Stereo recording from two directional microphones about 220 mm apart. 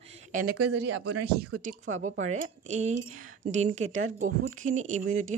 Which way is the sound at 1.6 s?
35° right (ahead or behind).